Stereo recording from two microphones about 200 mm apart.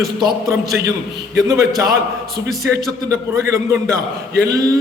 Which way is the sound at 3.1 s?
15° right (ahead or behind).